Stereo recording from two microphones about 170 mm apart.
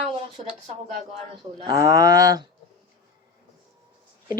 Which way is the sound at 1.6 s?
20° right (ahead or behind).